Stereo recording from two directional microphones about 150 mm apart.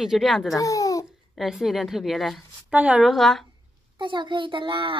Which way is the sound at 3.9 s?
30° right (ahead or behind).